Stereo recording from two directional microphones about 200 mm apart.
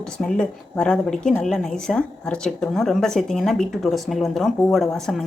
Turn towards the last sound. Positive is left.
turn(degrees=0)  # may be behind; listen again after turning